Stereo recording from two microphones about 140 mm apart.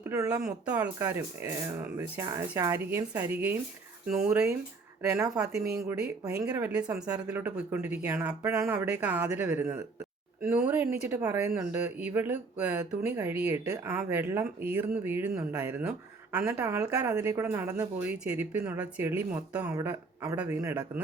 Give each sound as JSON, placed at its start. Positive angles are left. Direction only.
{"t": 0.1, "sound": "speech", "side_deg": -20}
{"t": 5.0, "sound": "speech", "side_deg": -20}
{"t": 6.6, "sound": "speech", "side_deg": -10}